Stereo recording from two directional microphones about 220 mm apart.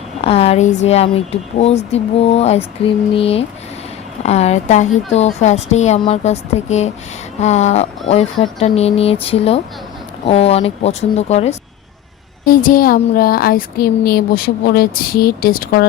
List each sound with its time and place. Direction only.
0.3 s a woman's voice: 25° left (ahead or behind); by 15.9 s 45° left (ahead or behind)